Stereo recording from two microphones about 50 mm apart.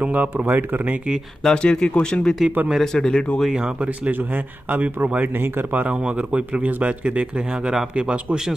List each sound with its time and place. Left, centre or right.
0.0 s speech: right
1.4 s speech: centre
3.5 s a man's voice: right